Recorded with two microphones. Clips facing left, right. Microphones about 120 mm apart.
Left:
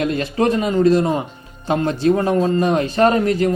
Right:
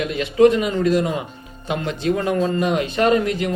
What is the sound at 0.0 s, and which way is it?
A man's voice, 40° left (ahead or behind).